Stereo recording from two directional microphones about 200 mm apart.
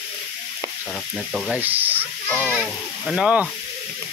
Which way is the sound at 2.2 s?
10° left (ahead or behind).